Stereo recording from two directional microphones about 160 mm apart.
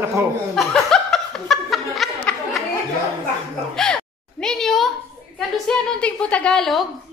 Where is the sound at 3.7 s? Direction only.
5° left (ahead or behind).